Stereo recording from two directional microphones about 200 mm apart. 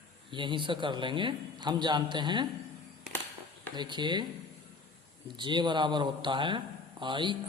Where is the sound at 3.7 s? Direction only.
20° right (ahead or behind).